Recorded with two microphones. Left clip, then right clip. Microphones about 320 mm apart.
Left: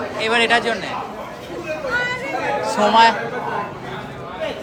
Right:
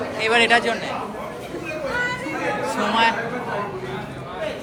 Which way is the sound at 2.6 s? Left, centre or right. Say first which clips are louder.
Left 7 dB; centre.